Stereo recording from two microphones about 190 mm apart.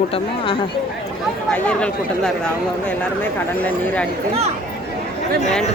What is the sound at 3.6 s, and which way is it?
Speech, 10° left (ahead or behind).